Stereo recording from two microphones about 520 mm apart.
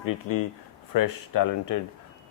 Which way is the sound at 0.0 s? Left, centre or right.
Left.